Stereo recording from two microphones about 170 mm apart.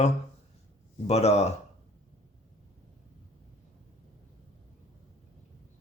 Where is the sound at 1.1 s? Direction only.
40° left (ahead or behind).